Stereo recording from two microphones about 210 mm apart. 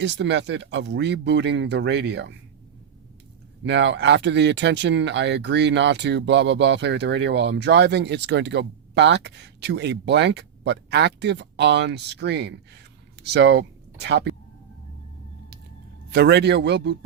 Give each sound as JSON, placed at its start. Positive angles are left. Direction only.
{"t": 0.0, "sound": "speech", "side_deg": -55}
{"t": 3.6, "sound": "speech", "side_deg": -55}
{"t": 16.0, "sound": "a man's voice", "side_deg": -50}